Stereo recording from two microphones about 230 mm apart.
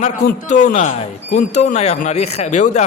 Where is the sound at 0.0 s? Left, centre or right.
Left.